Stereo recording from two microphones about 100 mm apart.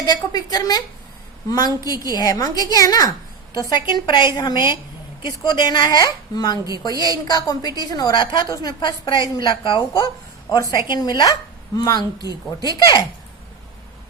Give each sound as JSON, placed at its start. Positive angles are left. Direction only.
{"t": 0.0, "sound": "a woman's voice", "side_deg": 40}
{"t": 6.9, "sound": "a woman's voice", "side_deg": -35}
{"t": 7.3, "sound": "a woman's voice", "side_deg": 40}
{"t": 10.5, "sound": "a woman's voice", "side_deg": 40}